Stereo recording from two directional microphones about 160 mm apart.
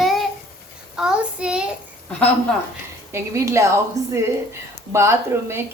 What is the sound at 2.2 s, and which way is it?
Speech, 10° left (ahead or behind).